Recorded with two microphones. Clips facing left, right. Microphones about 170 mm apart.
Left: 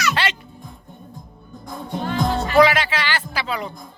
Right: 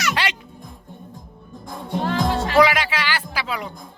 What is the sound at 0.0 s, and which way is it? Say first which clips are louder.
Music: left 1 dB; 15° right (ahead or behind).